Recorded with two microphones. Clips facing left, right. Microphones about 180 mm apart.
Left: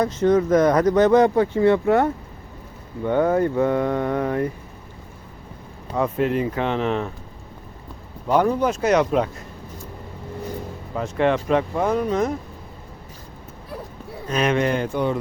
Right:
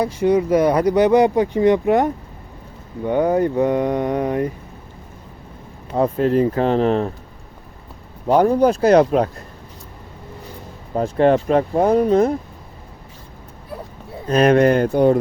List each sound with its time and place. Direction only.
0.0 s speech: 10° right (ahead or behind)
5.9 s speech: 35° right (ahead or behind)
8.3 s speech: 40° right (ahead or behind)
10.9 s speech: 40° right (ahead or behind)
14.3 s speech: 35° right (ahead or behind)